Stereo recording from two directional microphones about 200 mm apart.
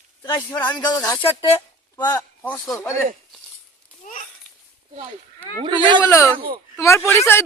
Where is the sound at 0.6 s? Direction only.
10° left (ahead or behind).